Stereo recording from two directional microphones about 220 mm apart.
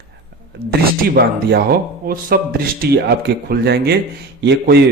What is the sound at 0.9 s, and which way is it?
A man's voice, 45° right (ahead or behind).